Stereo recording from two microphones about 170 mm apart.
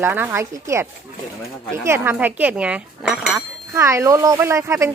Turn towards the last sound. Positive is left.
turn(degrees=-15)  # may be behind; listen again after turning